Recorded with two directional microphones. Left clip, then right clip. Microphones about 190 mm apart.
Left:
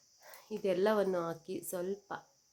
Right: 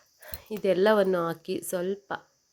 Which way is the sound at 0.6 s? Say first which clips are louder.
Right 9 dB; 30° right (ahead or behind).